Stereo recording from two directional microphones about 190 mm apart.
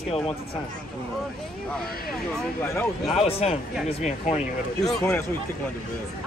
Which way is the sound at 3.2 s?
30° left (ahead or behind).